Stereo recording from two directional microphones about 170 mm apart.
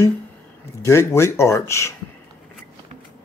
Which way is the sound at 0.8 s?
15° left (ahead or behind).